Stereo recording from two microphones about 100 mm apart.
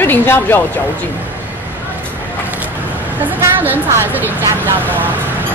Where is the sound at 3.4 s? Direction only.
20° right (ahead or behind).